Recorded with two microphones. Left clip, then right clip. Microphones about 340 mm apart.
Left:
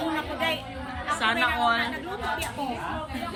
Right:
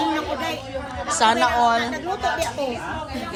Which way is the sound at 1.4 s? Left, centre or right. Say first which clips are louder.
Right 5 dB; centre.